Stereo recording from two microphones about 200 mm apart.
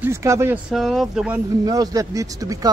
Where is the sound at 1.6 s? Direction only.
20° right (ahead or behind).